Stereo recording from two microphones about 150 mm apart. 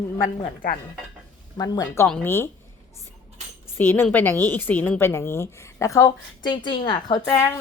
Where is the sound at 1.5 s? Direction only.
25° left (ahead or behind).